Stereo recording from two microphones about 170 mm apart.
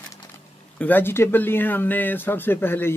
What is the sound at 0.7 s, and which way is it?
Speech, 10° left (ahead or behind).